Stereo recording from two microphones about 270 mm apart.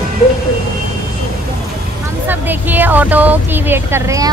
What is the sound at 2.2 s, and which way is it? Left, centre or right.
Speech, centre.